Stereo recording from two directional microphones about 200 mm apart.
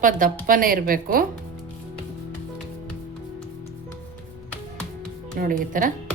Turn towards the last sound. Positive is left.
turn(degrees=-45)  # may be behind; listen again after turning